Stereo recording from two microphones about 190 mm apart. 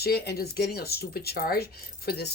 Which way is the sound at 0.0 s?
55° left (ahead or behind).